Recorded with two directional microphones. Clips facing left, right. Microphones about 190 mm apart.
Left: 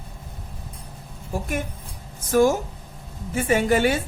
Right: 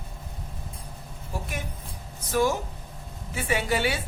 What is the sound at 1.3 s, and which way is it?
Speech, 50° left (ahead or behind).